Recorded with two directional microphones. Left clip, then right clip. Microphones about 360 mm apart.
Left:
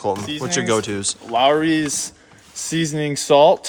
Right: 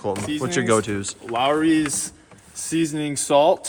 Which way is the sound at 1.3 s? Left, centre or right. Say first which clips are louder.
Left 3 dB; left.